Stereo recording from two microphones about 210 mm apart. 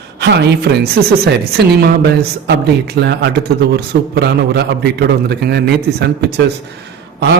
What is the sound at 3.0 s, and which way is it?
A man's voice, 50° right (ahead or behind).